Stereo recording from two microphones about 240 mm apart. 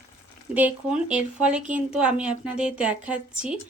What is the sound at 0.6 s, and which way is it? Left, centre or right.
Speech, centre.